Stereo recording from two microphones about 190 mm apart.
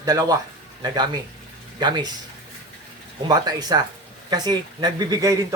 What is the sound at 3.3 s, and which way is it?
Speech, 20° right (ahead or behind).